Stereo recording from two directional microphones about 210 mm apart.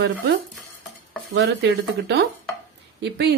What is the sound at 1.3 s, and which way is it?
A woman's voice, 55° right (ahead or behind).